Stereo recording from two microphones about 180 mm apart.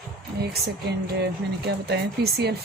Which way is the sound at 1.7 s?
65° right (ahead or behind).